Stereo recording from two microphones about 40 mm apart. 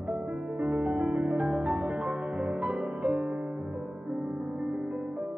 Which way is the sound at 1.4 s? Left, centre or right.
Right.